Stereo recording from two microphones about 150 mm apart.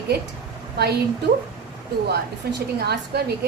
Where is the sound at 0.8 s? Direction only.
90° right.